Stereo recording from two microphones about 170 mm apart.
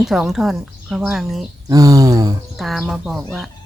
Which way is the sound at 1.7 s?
20° right (ahead or behind).